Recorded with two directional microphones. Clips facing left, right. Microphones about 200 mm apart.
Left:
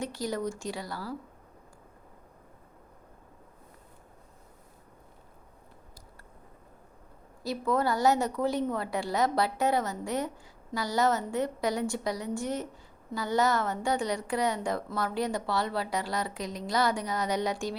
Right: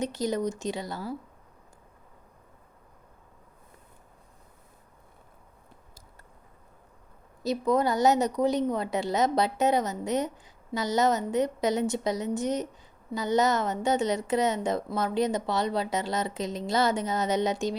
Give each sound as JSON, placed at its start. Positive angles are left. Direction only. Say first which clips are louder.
{"t": 0.0, "sound": "a woman's voice", "louder": "right 4 dB", "side_deg": -20}
{"t": 7.4, "sound": "a woman's voice", "louder": "right 3 dB", "side_deg": -20}